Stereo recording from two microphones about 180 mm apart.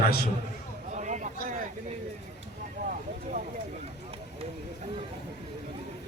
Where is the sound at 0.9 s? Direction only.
40° right (ahead or behind).